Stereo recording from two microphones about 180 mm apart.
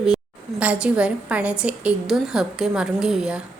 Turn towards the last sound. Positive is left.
turn(degrees=-5)  # may be behind; listen again after turning